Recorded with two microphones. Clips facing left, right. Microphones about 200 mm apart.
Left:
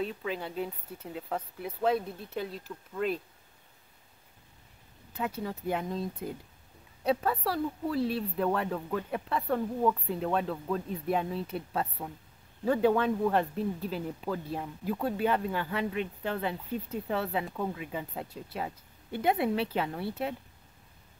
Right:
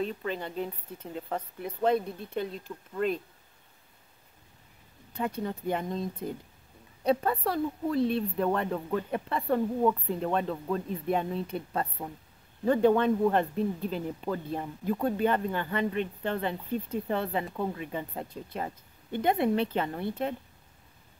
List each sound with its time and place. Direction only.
0.0 s speech: 5° left (ahead or behind)
5.1 s speech: 5° left (ahead or behind)